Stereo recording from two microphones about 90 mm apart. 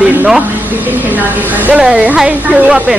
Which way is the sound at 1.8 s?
10° right (ahead or behind).